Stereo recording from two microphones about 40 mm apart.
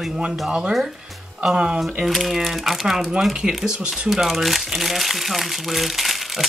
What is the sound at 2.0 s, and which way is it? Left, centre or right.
Speech, centre.